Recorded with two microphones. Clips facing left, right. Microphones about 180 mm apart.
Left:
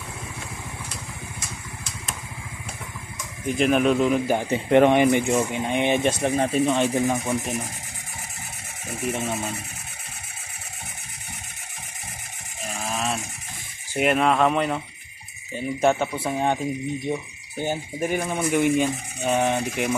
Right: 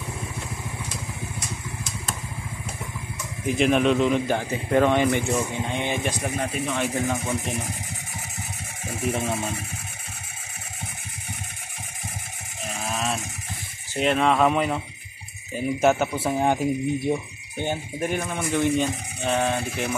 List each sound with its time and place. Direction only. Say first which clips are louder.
3.4 s a man's voice: even; centre (ahead or behind)
4.4 s speech: left 4 dB; 20° left (ahead or behind)
9.2 s speech: right 1 dB; 5° left (ahead or behind)
12.6 s sheep: even; centre (ahead or behind)
13.9 s a man's voice: left 1 dB; 5° left (ahead or behind)
17.6 s speech: left 1 dB; 10° left (ahead or behind)